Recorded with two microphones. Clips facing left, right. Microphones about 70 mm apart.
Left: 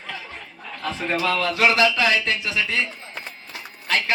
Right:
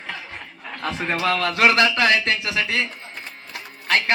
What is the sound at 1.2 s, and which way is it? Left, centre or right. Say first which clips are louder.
A man's voice: right 2 dB; right.